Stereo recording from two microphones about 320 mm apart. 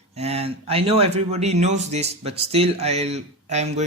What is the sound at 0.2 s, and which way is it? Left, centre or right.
Speech, centre.